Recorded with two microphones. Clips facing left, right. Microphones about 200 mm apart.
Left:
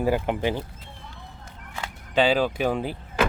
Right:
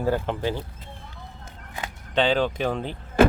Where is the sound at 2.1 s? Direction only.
10° left (ahead or behind).